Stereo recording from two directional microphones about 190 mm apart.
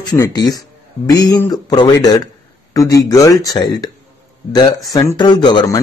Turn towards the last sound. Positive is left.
turn(degrees=25)  # may be behind; listen again after turning